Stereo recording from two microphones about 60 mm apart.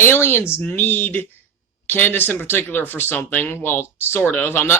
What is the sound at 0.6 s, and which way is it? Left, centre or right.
Speech, left.